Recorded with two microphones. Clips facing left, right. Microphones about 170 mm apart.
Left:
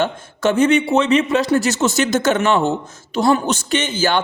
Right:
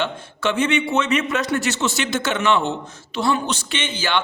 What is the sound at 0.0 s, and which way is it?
A man's voice, 45° left (ahead or behind).